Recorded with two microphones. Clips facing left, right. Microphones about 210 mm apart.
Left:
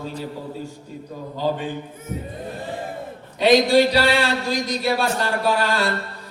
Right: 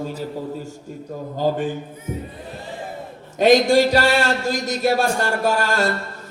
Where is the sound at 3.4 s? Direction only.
45° right (ahead or behind).